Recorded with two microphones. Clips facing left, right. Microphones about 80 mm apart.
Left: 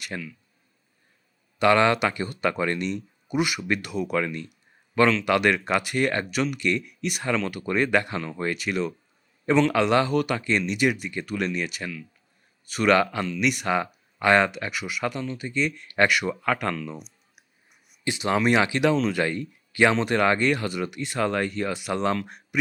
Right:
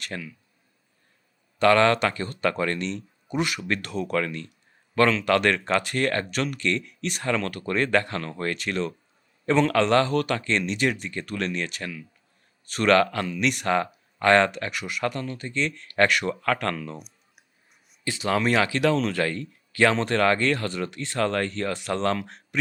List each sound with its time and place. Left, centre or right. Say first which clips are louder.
0.1 s speech: left 1 dB; centre
1.5 s speech: right 1 dB; centre
18.0 s speech: left 1 dB; centre